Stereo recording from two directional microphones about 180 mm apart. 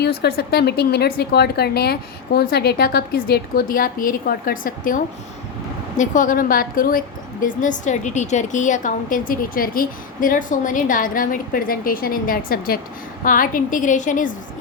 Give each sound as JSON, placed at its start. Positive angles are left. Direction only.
{"t": 0.0, "sound": "a woman's voice", "side_deg": 65}